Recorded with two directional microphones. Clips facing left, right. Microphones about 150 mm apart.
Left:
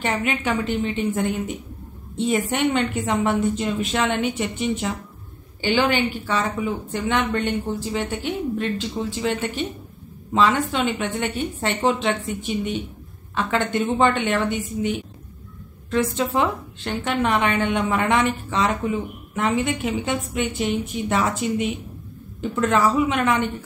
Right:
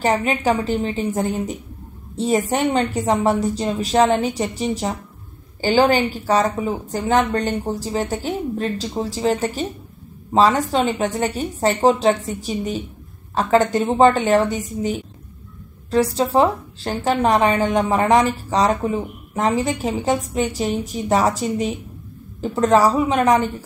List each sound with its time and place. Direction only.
0.0 s a woman's voice: 35° right (ahead or behind)